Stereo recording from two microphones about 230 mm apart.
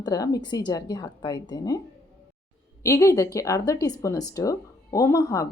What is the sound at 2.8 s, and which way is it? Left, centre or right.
Speech, centre.